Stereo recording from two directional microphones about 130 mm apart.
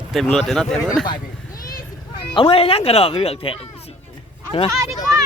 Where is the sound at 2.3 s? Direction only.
45° left (ahead or behind).